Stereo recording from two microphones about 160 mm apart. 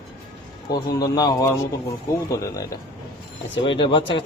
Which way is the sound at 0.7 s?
25° left (ahead or behind).